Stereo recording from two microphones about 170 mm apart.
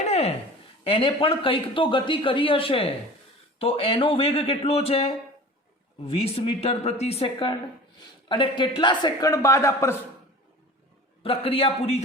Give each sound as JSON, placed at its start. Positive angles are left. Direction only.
{"t": 0.0, "sound": "a sound", "side_deg": 40}
{"t": 0.9, "sound": "a man's voice", "side_deg": 35}
{"t": 11.2, "sound": "speech", "side_deg": 35}